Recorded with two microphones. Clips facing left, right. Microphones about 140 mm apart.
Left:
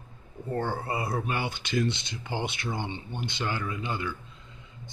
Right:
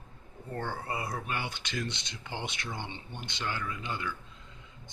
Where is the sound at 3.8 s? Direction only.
10° left (ahead or behind).